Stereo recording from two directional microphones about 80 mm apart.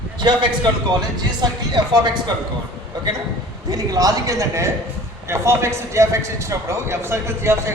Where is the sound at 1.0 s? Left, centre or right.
Right.